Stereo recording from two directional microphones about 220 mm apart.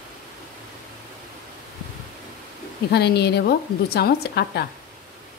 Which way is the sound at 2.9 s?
50° left (ahead or behind).